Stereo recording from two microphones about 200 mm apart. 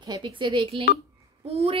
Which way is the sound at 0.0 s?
25° right (ahead or behind).